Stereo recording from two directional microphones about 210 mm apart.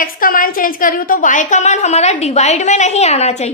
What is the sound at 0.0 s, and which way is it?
A woman's voice, 40° left (ahead or behind).